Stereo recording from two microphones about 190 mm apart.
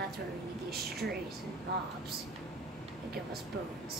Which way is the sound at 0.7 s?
55° right (ahead or behind).